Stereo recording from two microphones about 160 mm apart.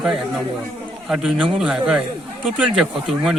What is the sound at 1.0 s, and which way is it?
A man's voice, 5° right (ahead or behind).